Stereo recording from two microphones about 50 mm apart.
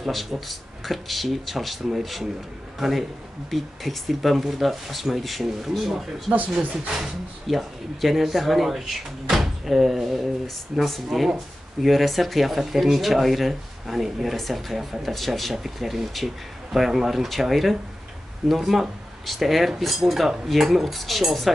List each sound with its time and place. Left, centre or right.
0.0 s speech: centre
6.6 s speech: right
7.4 s speech: centre